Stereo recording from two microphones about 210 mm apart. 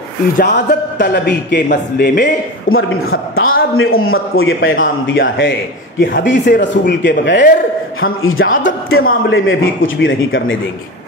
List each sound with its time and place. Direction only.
0.4 s a man's voice: 40° left (ahead or behind)
2.7 s a man's voice: 70° left (ahead or behind)
8.0 s a man's voice: 75° left (ahead or behind)